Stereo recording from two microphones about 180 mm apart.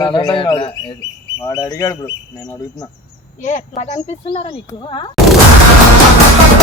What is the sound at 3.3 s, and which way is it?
A woman's voice, 45° left (ahead or behind).